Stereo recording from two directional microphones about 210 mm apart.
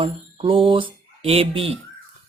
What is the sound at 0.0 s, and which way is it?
Speech, 25° right (ahead or behind).